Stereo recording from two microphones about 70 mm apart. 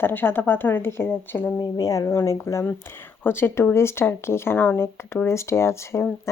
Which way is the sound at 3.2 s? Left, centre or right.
Left.